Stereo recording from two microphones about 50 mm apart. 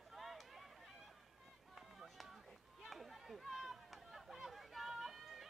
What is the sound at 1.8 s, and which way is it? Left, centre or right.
Run, centre.